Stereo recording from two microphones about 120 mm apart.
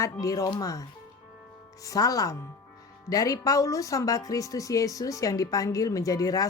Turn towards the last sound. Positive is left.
turn(degrees=30)  # may be behind; listen again after turning